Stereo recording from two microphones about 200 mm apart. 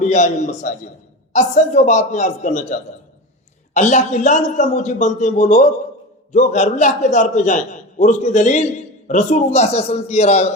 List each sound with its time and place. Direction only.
0.0 s a man's voice: 35° left (ahead or behind)
3.8 s a man's voice: 35° left (ahead or behind)